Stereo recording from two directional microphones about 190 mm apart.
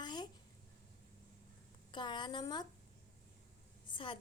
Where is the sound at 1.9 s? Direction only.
25° left (ahead or behind).